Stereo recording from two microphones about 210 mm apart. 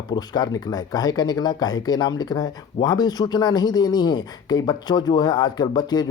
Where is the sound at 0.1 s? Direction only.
20° left (ahead or behind).